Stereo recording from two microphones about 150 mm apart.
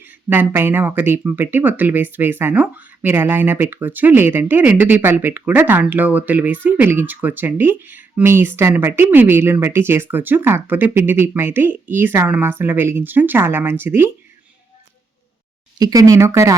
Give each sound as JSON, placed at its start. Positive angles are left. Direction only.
{"t": 0.0, "sound": "speech", "side_deg": -15}
{"t": 15.8, "sound": "speech", "side_deg": -25}